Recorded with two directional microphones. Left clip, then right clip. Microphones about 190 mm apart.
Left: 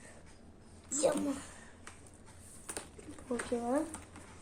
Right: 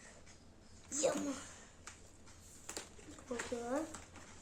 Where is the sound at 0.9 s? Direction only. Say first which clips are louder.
Left 5 dB; centre (ahead or behind).